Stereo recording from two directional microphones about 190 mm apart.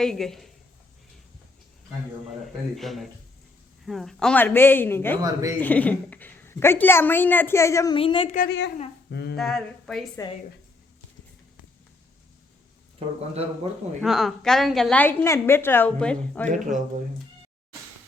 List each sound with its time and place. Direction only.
0.0 s a woman's voice: centre (ahead or behind)
2.7 s a woman's voice: centre (ahead or behind)
5.2 s a man's voice: 15° right (ahead or behind)
5.5 s a woman's voice: 10° left (ahead or behind)
7.9 s speech: 25° left (ahead or behind)
8.4 s a woman's voice: 65° left (ahead or behind)
9.0 s a sound: 60° left (ahead or behind)
9.3 s a woman's voice: 5° left (ahead or behind)
14.0 s a woman's voice: centre (ahead or behind)
16.5 s speech: 40° right (ahead or behind)